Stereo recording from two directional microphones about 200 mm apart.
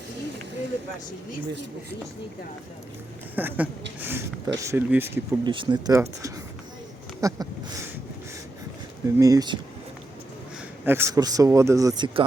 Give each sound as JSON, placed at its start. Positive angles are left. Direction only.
{"t": 3.3, "sound": "speech", "side_deg": -10}
{"t": 5.5, "sound": "speech", "side_deg": -25}
{"t": 9.1, "sound": "speech", "side_deg": -15}
{"t": 10.8, "sound": "speech", "side_deg": -10}